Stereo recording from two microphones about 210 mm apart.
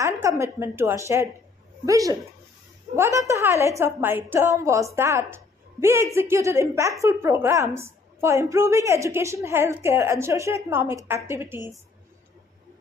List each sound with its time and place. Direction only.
0.0 s a woman's voice: 15° right (ahead or behind)